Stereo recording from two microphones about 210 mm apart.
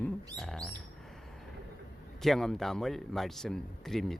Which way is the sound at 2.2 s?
Centre (ahead or behind).